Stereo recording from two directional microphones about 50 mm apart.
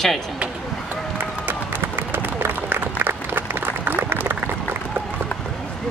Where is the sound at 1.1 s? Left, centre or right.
Right.